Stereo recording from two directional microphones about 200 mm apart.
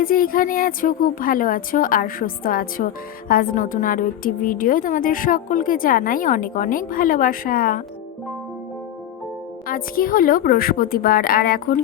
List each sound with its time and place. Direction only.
0.0 s a woman's voice: 45° left (ahead or behind)
9.6 s a woman's voice: 45° left (ahead or behind)